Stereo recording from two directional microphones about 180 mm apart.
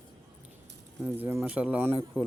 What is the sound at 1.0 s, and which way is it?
Speech, 10° right (ahead or behind).